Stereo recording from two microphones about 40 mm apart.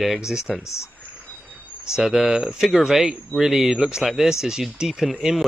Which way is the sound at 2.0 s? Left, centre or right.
Centre.